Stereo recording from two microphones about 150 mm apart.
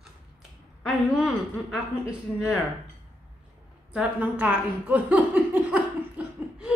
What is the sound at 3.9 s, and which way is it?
Speech, 10° right (ahead or behind).